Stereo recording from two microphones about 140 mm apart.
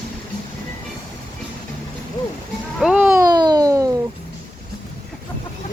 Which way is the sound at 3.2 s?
30° right (ahead or behind).